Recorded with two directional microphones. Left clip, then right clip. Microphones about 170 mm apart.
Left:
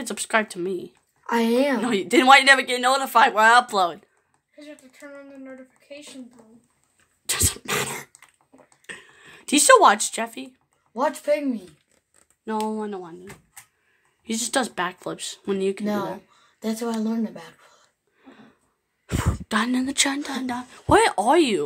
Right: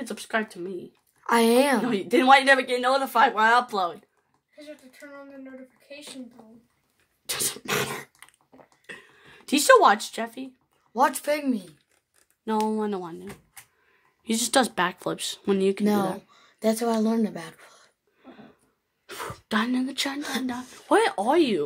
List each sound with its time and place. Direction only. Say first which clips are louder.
0.0 s speech: left 5 dB; 25° left (ahead or behind)
1.2 s speech: right 1 dB; 45° right (ahead or behind)
1.9 s speech: left 6 dB; 20° left (ahead or behind)
7.2 s a sound: left 5 dB; 15° left (ahead or behind)
7.6 s dog: left 1 dB; 5° right (ahead or behind)
8.8 s a sound: left 4 dB; 10° left (ahead or behind)
9.5 s speech: left 2 dB; 10° left (ahead or behind)
10.9 s speech: even; 45° right (ahead or behind)
12.7 s speech: right 2 dB; 20° right (ahead or behind)
16.5 s speech: right 4 dB; 65° right (ahead or behind)
18.2 s a sound: right 1 dB; 5° left (ahead or behind)
19.0 s speech: left 4 dB; 5° left (ahead or behind)